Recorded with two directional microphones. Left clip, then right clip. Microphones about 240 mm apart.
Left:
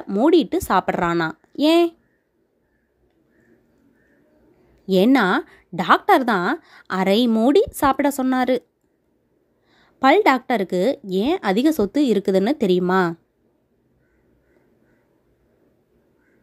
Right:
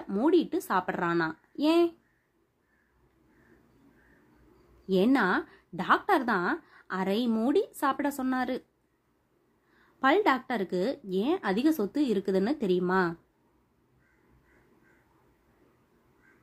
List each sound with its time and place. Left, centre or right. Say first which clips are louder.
0.1 s a woman's voice: left 9 dB; left
4.8 s a woman's voice: left 9 dB; left
9.8 s a woman's voice: left 9 dB; left